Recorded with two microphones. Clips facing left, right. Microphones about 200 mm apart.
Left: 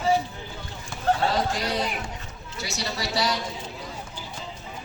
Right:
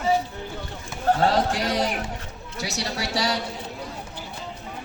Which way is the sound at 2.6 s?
70° right (ahead or behind).